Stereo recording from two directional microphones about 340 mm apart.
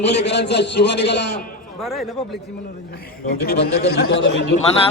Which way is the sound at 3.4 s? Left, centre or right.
Left.